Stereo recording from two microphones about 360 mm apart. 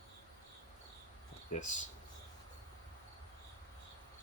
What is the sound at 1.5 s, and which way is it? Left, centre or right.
Speech, centre.